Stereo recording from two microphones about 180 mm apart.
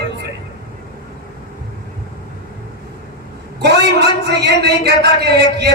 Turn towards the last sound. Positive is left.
turn(degrees=-70)  # may be behind; listen again after turning